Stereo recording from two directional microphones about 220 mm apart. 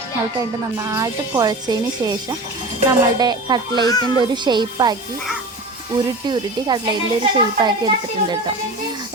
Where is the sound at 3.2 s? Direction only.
20° right (ahead or behind).